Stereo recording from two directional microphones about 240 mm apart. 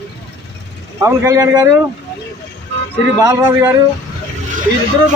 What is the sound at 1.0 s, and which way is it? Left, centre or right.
Speech, centre.